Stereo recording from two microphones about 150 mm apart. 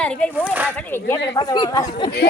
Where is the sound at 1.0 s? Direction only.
25° left (ahead or behind).